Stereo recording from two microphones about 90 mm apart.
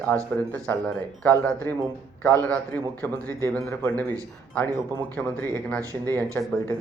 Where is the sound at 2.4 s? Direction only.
20° left (ahead or behind).